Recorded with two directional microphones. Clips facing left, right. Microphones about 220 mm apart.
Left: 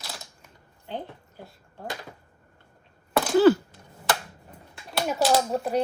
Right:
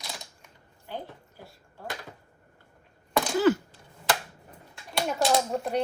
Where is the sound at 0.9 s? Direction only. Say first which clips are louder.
Left 3 dB; 20° left (ahead or behind).